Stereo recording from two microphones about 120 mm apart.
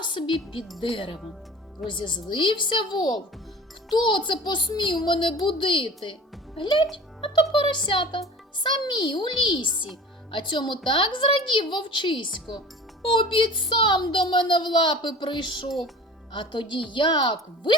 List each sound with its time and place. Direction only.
0.0 s music: 40° left (ahead or behind)
0.8 s a woman's voice: 45° left (ahead or behind)
6.9 s a sound: 45° left (ahead or behind)
7.5 s a woman's voice: 40° left (ahead or behind)